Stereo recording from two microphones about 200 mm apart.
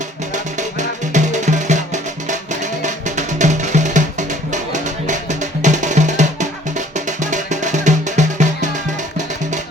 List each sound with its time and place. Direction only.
0.5 s music: 35° right (ahead or behind)